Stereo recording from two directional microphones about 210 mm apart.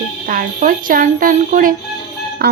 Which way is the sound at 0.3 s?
40° right (ahead or behind).